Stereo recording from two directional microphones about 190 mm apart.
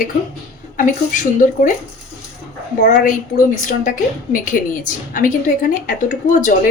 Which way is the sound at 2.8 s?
45° left (ahead or behind).